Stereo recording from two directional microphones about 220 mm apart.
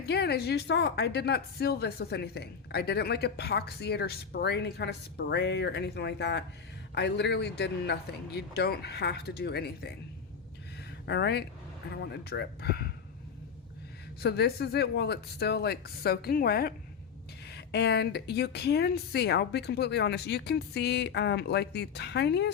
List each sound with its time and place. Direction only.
0.0 s a woman's voice: 50° left (ahead or behind)
11.0 s a woman's voice: 50° left (ahead or behind)
14.2 s a woman's voice: 45° left (ahead or behind)